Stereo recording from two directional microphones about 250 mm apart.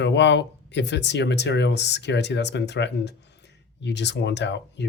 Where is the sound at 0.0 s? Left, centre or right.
Left.